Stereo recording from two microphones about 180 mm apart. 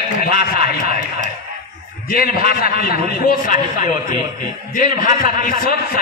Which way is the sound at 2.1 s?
55° left (ahead or behind).